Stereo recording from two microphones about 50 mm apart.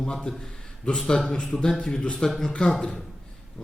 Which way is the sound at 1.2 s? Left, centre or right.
Centre.